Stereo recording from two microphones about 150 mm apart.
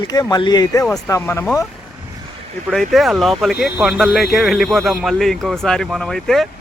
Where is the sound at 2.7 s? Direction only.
Centre (ahead or behind).